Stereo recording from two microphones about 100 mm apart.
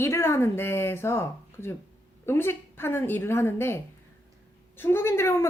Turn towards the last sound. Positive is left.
turn(degrees=25)  # may be behind; listen again after turning